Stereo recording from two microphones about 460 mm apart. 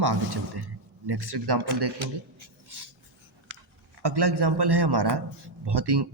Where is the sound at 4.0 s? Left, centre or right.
Right.